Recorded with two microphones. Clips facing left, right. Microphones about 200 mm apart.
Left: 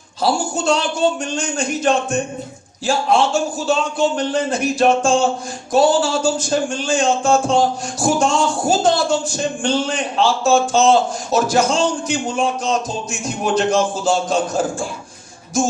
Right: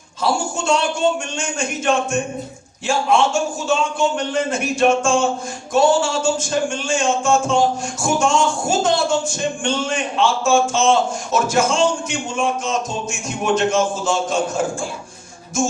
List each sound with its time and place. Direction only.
0.2 s speech: 35° left (ahead or behind)